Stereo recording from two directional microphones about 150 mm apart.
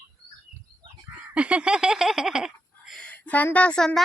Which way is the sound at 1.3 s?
10° right (ahead or behind).